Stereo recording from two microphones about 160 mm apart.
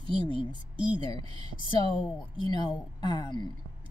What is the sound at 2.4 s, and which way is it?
Speech, 30° left (ahead or behind).